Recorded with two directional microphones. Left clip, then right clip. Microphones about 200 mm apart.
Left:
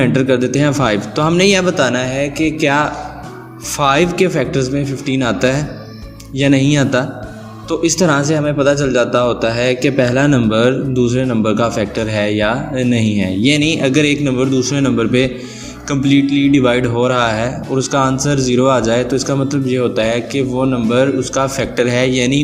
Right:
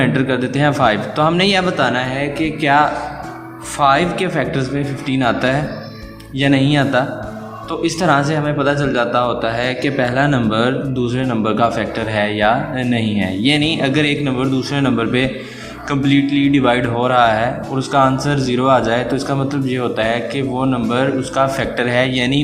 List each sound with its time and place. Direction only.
0.0 s a man's voice: 35° left (ahead or behind)